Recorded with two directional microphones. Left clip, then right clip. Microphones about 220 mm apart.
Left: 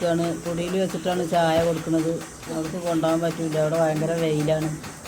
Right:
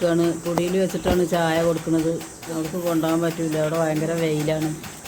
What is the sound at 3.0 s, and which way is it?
Speech, 20° right (ahead or behind).